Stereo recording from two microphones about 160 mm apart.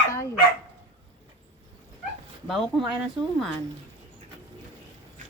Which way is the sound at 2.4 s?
Centre (ahead or behind).